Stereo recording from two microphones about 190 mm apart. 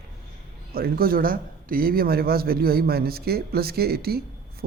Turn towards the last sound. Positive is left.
turn(degrees=-55)  # may be behind; listen again after turning